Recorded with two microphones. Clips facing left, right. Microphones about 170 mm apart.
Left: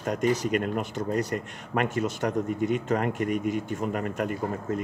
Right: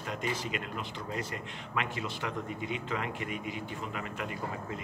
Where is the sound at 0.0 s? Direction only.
45° left (ahead or behind).